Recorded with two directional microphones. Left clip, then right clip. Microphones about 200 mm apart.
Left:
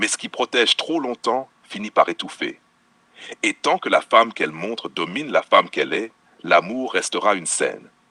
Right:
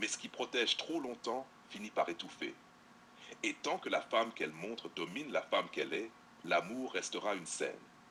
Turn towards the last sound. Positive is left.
turn(degrees=40)  # may be behind; listen again after turning